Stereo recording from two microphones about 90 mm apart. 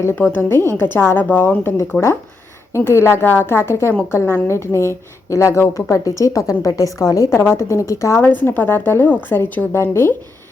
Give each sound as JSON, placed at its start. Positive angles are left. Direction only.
{"t": 0.3, "sound": "a woman's voice", "side_deg": 25}
{"t": 8.4, "sound": "a woman's voice", "side_deg": 20}